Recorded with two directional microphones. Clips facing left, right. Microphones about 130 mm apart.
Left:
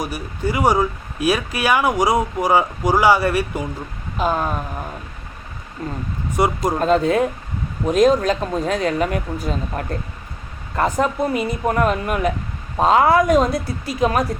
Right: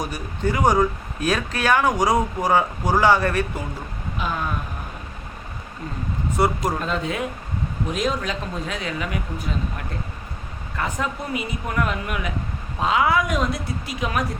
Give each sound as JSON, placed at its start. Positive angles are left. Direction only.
{"t": 0.0, "sound": "speech", "side_deg": 10}
{"t": 4.2, "sound": "speech", "side_deg": 40}
{"t": 5.8, "sound": "speech", "side_deg": 45}
{"t": 6.4, "sound": "speech", "side_deg": 15}
{"t": 6.7, "sound": "speech", "side_deg": 40}